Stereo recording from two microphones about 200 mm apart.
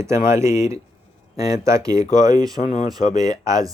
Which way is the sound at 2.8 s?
20° right (ahead or behind).